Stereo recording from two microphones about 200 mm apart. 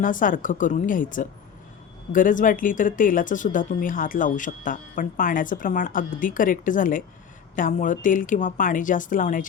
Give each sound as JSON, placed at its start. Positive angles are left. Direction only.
{"t": 0.0, "sound": "speech", "side_deg": 40}